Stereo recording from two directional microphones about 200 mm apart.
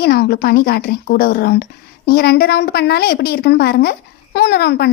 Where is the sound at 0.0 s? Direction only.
50° left (ahead or behind).